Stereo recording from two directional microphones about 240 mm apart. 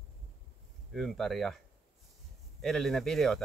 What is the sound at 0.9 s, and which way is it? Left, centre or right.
Speech, centre.